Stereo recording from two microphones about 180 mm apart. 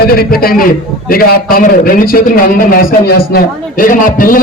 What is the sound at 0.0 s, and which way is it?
A man's voice, 55° left (ahead or behind).